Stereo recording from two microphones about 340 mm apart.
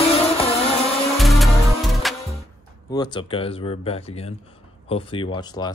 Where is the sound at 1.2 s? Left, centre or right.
Centre.